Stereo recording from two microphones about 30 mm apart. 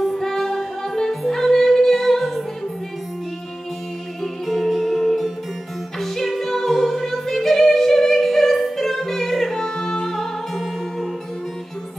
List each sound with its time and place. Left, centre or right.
0.1 s music: centre
4.2 s music: centre
9.6 s music: left
10.1 s music: centre